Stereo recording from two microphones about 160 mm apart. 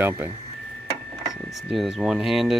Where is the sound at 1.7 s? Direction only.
Centre (ahead or behind).